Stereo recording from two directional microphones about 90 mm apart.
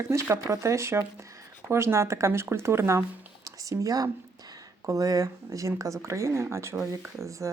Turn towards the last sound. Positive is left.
turn(degrees=-35)  # may be behind; listen again after turning